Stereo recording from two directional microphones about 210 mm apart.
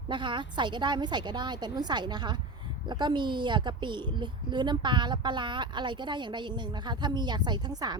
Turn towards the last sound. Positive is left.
turn(degrees=-20)  # may be behind; listen again after turning